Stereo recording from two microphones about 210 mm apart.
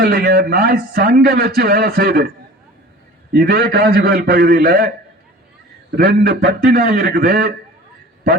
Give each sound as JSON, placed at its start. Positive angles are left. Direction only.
{"t": 0.0, "sound": "a man's voice", "side_deg": -45}
{"t": 3.3, "sound": "a man's voice", "side_deg": -50}
{"t": 6.0, "sound": "a man's voice", "side_deg": -45}